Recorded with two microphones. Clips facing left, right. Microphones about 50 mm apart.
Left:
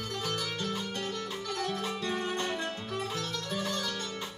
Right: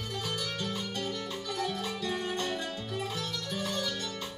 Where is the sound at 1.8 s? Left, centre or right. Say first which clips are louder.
Left 1 dB; left.